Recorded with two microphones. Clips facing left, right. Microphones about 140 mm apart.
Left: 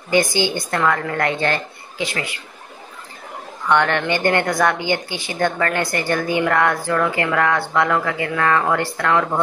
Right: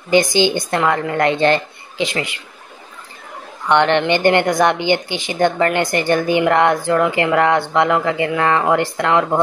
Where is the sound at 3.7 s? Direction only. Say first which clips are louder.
Right 4 dB; 25° right (ahead or behind).